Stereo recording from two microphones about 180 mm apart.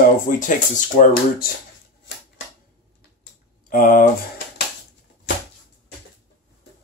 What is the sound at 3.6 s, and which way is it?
Speech, 50° left (ahead or behind).